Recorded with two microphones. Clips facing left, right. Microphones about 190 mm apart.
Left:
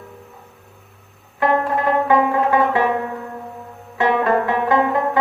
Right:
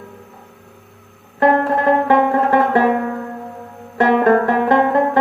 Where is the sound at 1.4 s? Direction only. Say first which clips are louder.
Right 4 dB; 50° right (ahead or behind).